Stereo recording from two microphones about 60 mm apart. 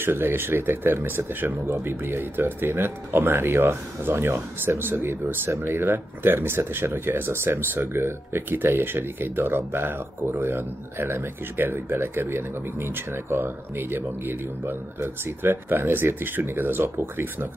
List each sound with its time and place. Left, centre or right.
0.0 s speech: right